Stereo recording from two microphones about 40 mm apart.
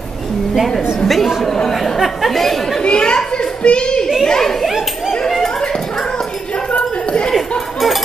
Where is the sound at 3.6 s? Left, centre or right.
Left.